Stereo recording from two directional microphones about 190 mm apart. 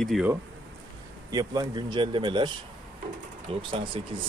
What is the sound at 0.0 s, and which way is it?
Speech, centre (ahead or behind).